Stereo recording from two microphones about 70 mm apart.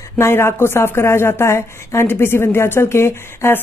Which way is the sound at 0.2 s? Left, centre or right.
Left.